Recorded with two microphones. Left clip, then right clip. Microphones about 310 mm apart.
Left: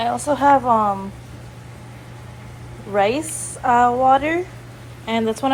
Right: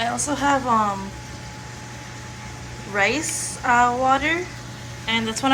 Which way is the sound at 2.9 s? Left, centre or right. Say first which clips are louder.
Left 3 dB; centre.